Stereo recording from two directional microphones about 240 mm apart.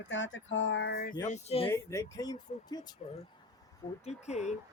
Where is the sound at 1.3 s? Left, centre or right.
Left.